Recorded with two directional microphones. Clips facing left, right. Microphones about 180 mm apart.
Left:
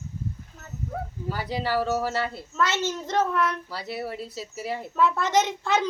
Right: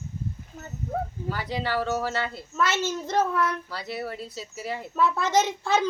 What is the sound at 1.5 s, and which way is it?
Speech, 5° left (ahead or behind).